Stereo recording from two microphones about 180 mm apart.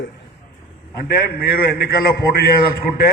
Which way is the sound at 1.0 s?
60° left (ahead or behind).